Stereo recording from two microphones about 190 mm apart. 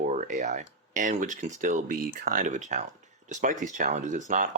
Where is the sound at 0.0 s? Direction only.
40° right (ahead or behind).